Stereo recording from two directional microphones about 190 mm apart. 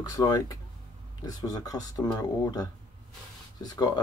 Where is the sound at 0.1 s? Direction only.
20° left (ahead or behind).